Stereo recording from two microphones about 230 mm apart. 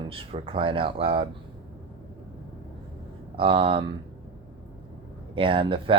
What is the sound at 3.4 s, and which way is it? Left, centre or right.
Speech, right.